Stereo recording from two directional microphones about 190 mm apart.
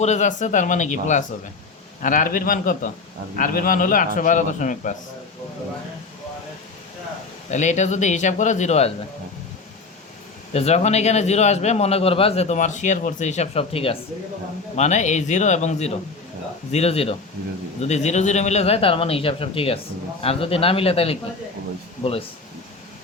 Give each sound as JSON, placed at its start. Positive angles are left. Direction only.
{"t": 0.0, "sound": "a man's voice", "side_deg": 40}
{"t": 7.5, "sound": "a man's voice", "side_deg": 40}
{"t": 10.5, "sound": "a man's voice", "side_deg": 35}